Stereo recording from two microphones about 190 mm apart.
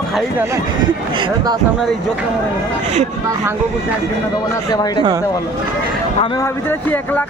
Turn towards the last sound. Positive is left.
turn(degrees=10)  # may be behind; listen again after turning